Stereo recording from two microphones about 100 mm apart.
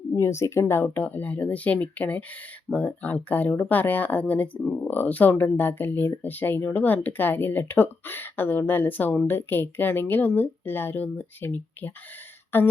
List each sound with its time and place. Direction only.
0.2 s speech: 30° left (ahead or behind)